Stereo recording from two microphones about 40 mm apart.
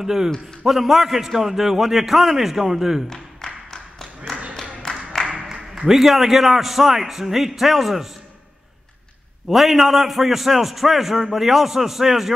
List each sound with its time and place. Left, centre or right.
0.0 s a man's voice: centre
3.1 s music: centre
5.3 s a man's voice: centre
9.5 s a man's voice: centre